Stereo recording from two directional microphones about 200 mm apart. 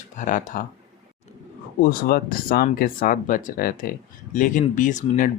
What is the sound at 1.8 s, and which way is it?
Speech, 45° left (ahead or behind).